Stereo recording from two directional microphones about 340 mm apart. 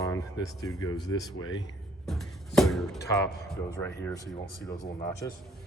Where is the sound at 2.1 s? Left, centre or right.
Centre.